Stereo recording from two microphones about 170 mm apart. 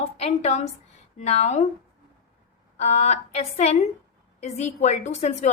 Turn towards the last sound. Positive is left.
turn(degrees=40)  # may be behind; listen again after turning